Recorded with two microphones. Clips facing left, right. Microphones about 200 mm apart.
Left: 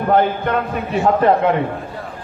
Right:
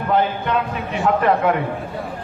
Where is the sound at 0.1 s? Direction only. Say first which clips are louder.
Left 3 dB; 50° left (ahead or behind).